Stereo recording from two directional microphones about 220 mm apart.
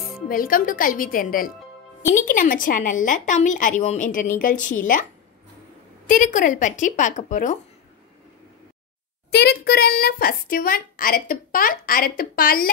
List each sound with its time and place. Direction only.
0.3 s a child's voice: 40° left (ahead or behind)
6.0 s a child's voice: 35° left (ahead or behind)
9.3 s a child's voice: 45° left (ahead or behind)